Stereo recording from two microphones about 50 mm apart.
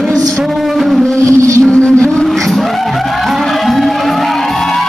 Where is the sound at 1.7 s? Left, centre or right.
Left.